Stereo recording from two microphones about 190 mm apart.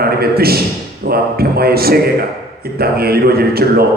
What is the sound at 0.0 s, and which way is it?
A man's voice, 55° right (ahead or behind).